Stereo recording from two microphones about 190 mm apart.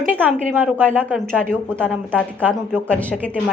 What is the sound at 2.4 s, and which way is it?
Speech, 10° right (ahead or behind).